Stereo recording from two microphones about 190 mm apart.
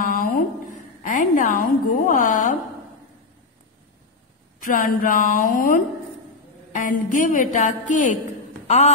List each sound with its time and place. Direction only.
0.1 s a sound: 50° left (ahead or behind)
1.0 s a woman's voice: 45° left (ahead or behind)
4.6 s a woman's voice: 45° left (ahead or behind)